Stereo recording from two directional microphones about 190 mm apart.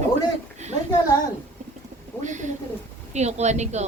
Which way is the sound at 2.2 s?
40° right (ahead or behind).